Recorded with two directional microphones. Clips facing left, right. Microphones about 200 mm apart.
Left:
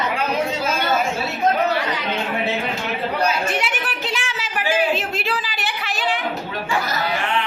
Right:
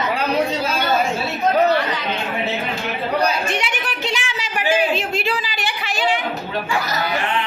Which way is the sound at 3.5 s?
5° left (ahead or behind).